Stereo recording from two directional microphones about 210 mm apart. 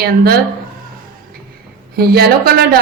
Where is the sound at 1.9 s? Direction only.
45° right (ahead or behind).